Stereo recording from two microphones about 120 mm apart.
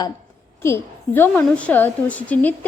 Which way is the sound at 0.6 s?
20° left (ahead or behind).